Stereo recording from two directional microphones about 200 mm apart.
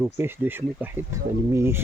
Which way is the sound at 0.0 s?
10° right (ahead or behind).